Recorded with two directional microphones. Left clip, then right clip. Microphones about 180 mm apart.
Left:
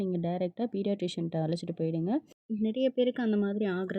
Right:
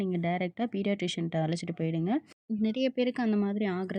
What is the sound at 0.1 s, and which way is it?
Speech, 15° right (ahead or behind).